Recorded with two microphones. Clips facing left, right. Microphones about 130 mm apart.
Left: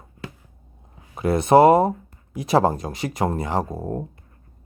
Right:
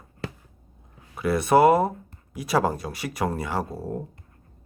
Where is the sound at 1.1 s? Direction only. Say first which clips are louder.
Left 4 dB; 25° left (ahead or behind).